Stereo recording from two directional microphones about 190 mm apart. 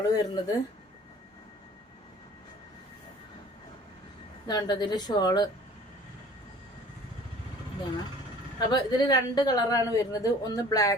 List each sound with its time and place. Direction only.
0.0 s a woman's voice: 20° left (ahead or behind)
4.4 s a woman's voice: 20° left (ahead or behind)
8.5 s a woman's voice: 20° left (ahead or behind)